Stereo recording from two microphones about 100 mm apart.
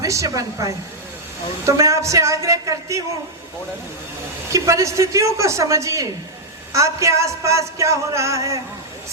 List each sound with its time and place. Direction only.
0.0 s a man's voice: 35° right (ahead or behind)
4.5 s a man's voice: 30° right (ahead or behind)